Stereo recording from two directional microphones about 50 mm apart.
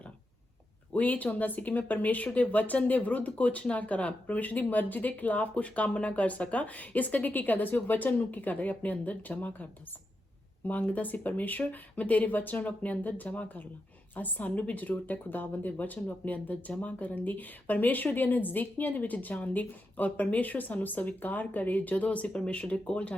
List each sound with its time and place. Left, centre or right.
0.9 s speech: left
10.7 s speech: left